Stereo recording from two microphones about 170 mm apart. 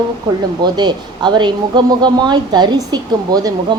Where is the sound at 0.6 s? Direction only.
25° right (ahead or behind).